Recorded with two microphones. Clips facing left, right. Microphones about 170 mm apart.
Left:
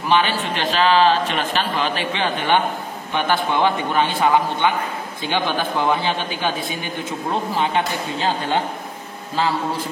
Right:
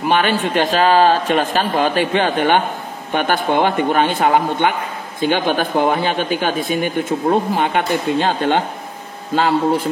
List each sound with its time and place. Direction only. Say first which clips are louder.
0.1 s a man's voice: right 2 dB; 50° right (ahead or behind)